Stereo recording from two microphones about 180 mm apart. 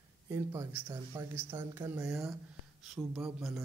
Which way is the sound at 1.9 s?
Centre (ahead or behind).